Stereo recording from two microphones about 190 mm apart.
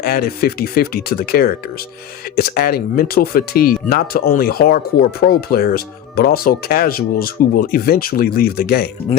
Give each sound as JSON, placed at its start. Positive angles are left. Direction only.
{"t": 0.0, "sound": "speech", "side_deg": 55}